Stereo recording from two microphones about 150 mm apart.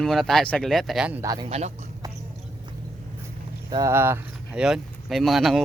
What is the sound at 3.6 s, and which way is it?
Speech, 30° right (ahead or behind).